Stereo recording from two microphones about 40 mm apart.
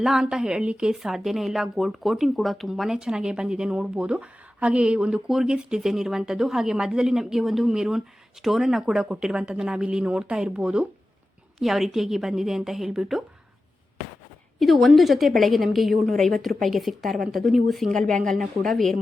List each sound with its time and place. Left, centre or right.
0.0 s a woman's voice: centre
0.9 s a woman's voice: centre
2.9 s a woman's voice: centre
5.1 s a woman's voice: centre
9.0 s a woman's voice: right
11.6 s a woman's voice: centre
14.6 s a woman's voice: centre